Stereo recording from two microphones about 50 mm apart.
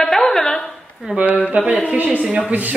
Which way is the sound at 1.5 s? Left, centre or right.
Right.